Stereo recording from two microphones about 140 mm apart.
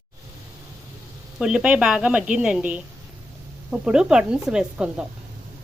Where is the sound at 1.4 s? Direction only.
5° right (ahead or behind).